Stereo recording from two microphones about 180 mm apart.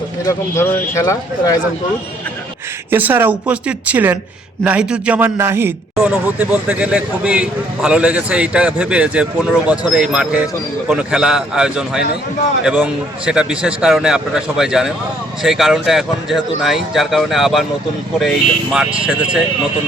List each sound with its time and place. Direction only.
0.3 s speech: 15° left (ahead or behind)
2.9 s a man's voice: 10° right (ahead or behind)